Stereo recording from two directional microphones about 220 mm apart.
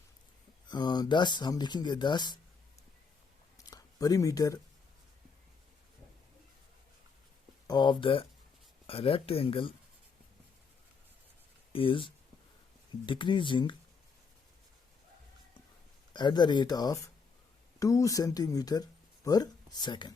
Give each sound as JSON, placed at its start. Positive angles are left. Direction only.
{"t": 0.7, "sound": "speech", "side_deg": 20}
{"t": 3.7, "sound": "speech", "side_deg": 15}
{"t": 7.7, "sound": "speech", "side_deg": 20}
{"t": 11.7, "sound": "speech", "side_deg": 25}
{"t": 16.1, "sound": "speech", "side_deg": 20}